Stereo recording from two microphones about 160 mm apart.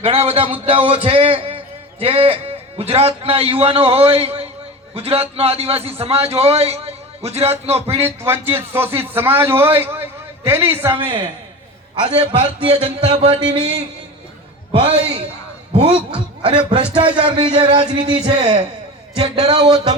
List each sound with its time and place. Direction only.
0.0 s a man's voice: 35° right (ahead or behind)
8.0 s a man's voice: 15° right (ahead or behind)
11.0 s a man's voice: 30° right (ahead or behind)
14.7 s a man's voice: 35° right (ahead or behind)
19.2 s a man's voice: 40° right (ahead or behind)